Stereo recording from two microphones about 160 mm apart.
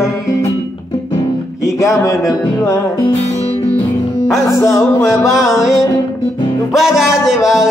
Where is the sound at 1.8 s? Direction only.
20° left (ahead or behind).